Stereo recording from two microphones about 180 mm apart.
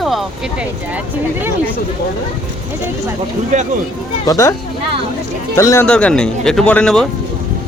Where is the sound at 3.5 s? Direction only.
45° right (ahead or behind).